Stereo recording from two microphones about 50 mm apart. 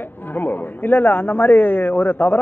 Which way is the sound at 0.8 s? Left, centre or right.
Left.